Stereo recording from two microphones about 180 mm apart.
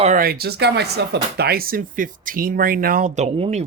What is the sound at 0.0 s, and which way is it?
Speech, 50° right (ahead or behind).